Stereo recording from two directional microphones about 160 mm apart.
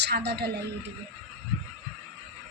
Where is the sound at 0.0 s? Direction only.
90° right.